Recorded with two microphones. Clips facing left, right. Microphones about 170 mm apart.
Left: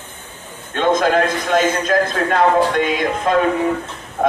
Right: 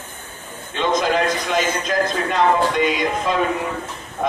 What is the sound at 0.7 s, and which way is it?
A man's voice, 50° left (ahead or behind).